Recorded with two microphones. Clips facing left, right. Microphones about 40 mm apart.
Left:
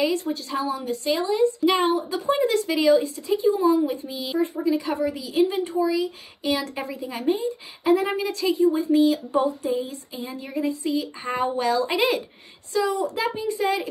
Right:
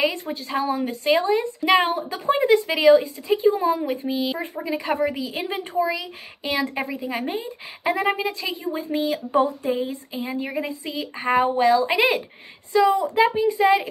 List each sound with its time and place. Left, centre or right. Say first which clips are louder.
0.0 s speech: even; right
8.2 s a woman's voice: even; right
8.5 s a woman's voice: left 7 dB; right; by 12.0 s centre
12.7 s speech: right 6 dB; right
13.3 s a woman's voice: right 6 dB; centre
13.6 s speech: right 6 dB; right